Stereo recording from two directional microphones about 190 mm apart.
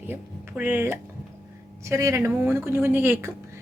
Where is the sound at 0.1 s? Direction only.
10° right (ahead or behind).